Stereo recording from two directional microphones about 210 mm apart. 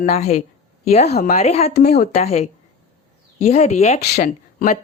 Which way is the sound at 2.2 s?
30° left (ahead or behind).